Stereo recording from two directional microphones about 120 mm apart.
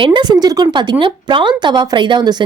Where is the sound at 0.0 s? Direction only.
40° right (ahead or behind).